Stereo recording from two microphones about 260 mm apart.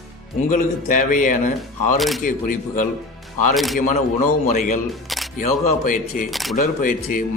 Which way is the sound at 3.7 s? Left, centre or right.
Left.